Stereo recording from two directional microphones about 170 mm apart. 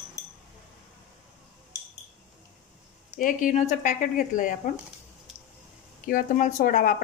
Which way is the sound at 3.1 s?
50° left (ahead or behind).